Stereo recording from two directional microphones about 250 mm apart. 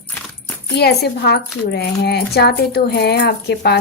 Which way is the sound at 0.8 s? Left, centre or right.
Left.